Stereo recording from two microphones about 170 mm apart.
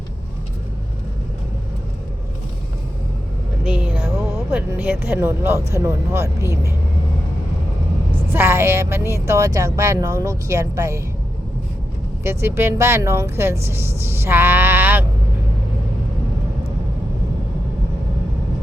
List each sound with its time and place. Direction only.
3.6 s speech: 5° right (ahead or behind)
8.3 s speech: 15° right (ahead or behind)
12.2 s speech: 15° right (ahead or behind)